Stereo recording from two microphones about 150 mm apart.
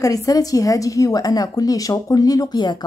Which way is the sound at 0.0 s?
25° left (ahead or behind).